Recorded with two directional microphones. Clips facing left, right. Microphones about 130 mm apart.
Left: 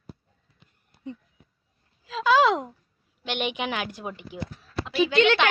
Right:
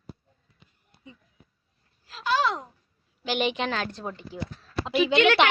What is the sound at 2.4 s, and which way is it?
Speech, 90° left.